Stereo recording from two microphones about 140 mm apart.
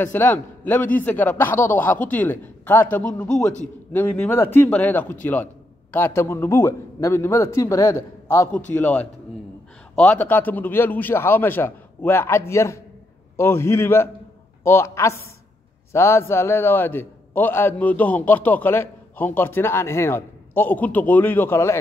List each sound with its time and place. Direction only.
0.0 s a man's voice: 15° left (ahead or behind)